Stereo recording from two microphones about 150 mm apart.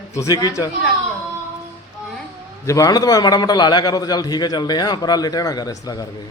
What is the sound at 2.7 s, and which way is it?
A man's voice, 25° left (ahead or behind).